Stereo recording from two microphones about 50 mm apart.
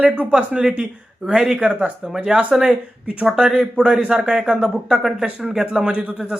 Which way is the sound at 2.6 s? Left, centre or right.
Right.